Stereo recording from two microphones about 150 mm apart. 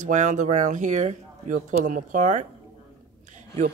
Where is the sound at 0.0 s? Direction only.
55° right (ahead or behind).